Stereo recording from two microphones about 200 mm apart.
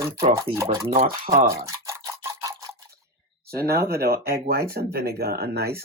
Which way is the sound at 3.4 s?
50° right (ahead or behind).